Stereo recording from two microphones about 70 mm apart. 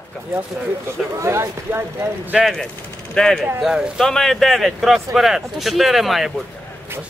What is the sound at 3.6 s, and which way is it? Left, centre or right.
Speech, centre.